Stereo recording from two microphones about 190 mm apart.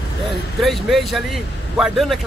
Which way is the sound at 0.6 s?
Centre (ahead or behind).